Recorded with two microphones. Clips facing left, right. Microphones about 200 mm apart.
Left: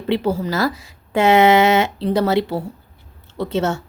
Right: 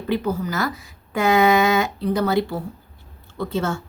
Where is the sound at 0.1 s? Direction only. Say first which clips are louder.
Left 4 dB; 30° left (ahead or behind).